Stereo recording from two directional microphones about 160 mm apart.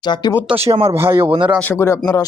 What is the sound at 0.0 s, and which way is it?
Speech, 25° left (ahead or behind).